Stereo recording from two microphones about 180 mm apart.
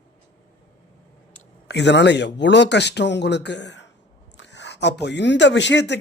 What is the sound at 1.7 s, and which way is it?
Speech, 70° left (ahead or behind).